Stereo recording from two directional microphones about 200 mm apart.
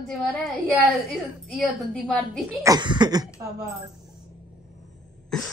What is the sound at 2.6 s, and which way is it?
Speech, 20° right (ahead or behind).